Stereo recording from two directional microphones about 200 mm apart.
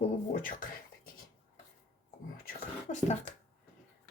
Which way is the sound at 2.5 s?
35° left (ahead or behind).